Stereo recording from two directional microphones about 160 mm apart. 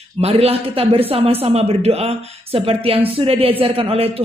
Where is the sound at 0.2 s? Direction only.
40° right (ahead or behind).